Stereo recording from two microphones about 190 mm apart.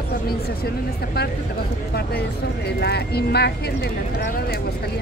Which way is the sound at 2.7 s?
60° left (ahead or behind).